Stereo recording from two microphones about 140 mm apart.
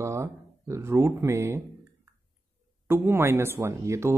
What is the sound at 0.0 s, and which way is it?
Speech, 20° right (ahead or behind).